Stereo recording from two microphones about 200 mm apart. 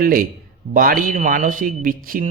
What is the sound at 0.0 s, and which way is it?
A man's voice, 45° right (ahead or behind).